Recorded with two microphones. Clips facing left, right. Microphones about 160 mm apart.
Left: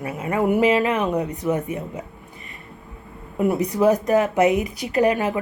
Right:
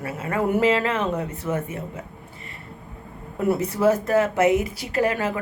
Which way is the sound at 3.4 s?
15° left (ahead or behind).